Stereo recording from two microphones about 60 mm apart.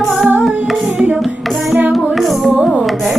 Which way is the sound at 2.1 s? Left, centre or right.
Centre.